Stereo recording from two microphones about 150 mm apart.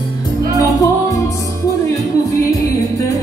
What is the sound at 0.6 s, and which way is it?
Music, 20° left (ahead or behind).